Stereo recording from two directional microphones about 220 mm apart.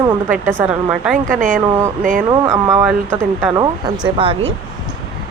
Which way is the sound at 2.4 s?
10° right (ahead or behind).